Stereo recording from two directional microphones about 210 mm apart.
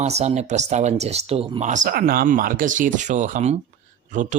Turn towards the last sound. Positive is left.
turn(degrees=-35)  # may be behind; listen again after turning